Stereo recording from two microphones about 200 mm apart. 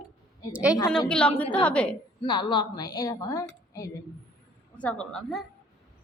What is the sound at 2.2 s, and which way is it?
A woman's voice, 20° left (ahead or behind).